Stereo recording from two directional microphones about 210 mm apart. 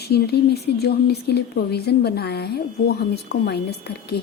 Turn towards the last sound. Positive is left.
turn(degrees=50)  # may be behind; listen again after turning